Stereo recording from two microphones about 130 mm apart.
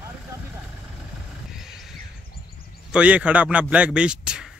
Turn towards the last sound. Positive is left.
turn(degrees=-5)  # may be behind; listen again after turning